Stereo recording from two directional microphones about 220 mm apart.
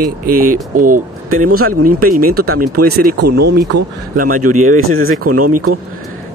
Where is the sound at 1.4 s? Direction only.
80° right.